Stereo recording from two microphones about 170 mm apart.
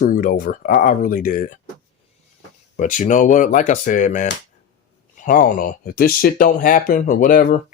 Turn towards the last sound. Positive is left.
turn(degrees=50)  # may be behind; listen again after turning